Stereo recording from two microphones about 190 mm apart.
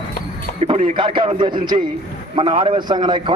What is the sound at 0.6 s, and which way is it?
A man's voice, 30° right (ahead or behind).